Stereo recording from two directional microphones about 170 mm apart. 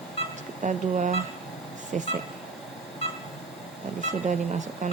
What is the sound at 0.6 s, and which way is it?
Speech, 45° right (ahead or behind).